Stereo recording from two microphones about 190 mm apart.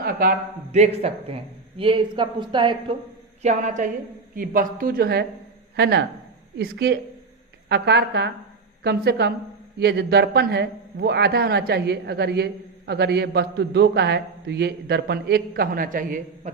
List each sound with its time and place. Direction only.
0.0 s speech: 50° right (ahead or behind)
0.7 s a man's voice: 35° right (ahead or behind)
3.4 s a man's voice: 40° right (ahead or behind)